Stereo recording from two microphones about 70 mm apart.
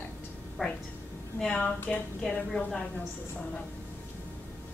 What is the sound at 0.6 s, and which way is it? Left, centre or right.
Speech, centre.